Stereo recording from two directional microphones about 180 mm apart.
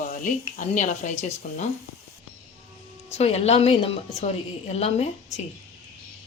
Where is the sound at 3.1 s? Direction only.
35° left (ahead or behind).